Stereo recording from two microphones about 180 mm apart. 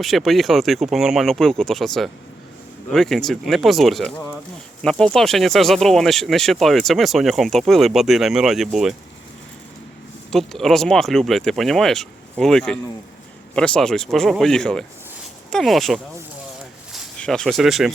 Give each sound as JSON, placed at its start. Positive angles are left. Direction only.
{"t": 0.0, "sound": "speech", "side_deg": 0}
{"t": 10.3, "sound": "speech", "side_deg": 0}